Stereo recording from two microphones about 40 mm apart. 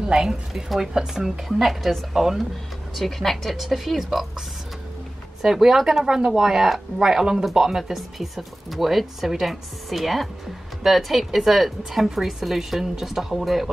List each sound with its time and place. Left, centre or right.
0.0 s a woman's voice: centre
5.4 s a woman's voice: centre